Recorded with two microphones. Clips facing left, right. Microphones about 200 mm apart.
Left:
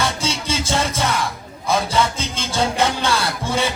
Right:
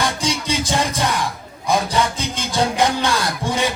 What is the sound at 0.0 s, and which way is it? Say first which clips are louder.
Music: right 1 dB; 15° right (ahead or behind).